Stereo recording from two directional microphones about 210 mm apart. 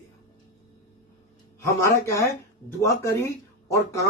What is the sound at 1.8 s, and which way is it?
Speech, 15° left (ahead or behind).